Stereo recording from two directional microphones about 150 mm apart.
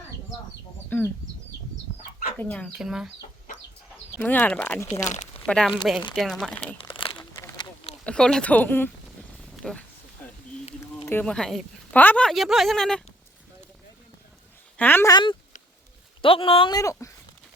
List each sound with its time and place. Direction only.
0.9 s speech: 10° left (ahead or behind)
2.4 s speech: 10° left (ahead or behind)
4.2 s speech: 10° left (ahead or behind)
6.7 s crumpling: 35° left (ahead or behind)
7.4 s a sound: 25° left (ahead or behind)
8.0 s speech: 5° left (ahead or behind)
9.5 s a sound: 5° left (ahead or behind)
11.0 s speech: 15° left (ahead or behind)
14.8 s speech: 15° left (ahead or behind)
15.1 s speech: 35° left (ahead or behind)